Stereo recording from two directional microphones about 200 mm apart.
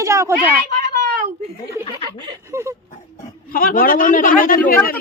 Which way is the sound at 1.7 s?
15° right (ahead or behind).